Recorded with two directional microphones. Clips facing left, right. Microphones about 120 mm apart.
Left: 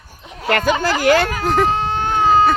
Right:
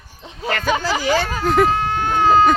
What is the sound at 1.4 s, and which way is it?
Speech, centre (ahead or behind).